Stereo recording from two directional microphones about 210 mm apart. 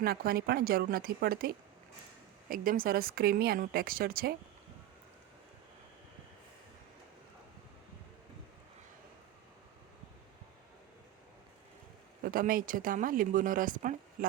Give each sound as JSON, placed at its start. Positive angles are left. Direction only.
{"t": 0.0, "sound": "speech", "side_deg": -45}
{"t": 12.2, "sound": "speech", "side_deg": -40}